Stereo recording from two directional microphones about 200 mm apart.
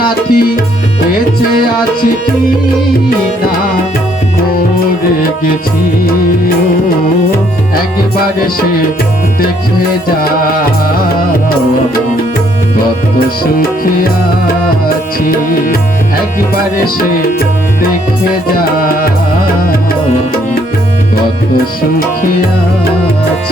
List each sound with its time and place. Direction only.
0.1 s tabla: 50° left (ahead or behind)